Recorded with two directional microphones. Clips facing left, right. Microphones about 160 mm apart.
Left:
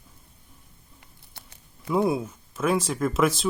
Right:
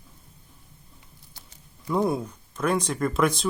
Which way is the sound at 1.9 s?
5° left (ahead or behind).